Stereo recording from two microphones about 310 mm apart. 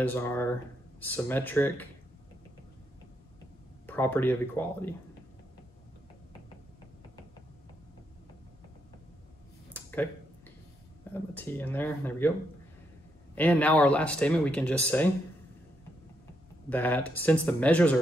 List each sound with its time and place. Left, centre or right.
0.0 s speech: centre
3.8 s speech: centre
9.7 s a sound: centre
11.3 s speech: centre
16.6 s speech: centre